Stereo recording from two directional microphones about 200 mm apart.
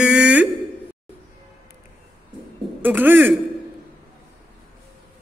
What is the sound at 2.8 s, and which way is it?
Speech, 10° right (ahead or behind).